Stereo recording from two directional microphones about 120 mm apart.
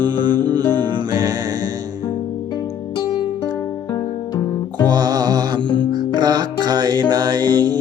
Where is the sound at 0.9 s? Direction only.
35° right (ahead or behind).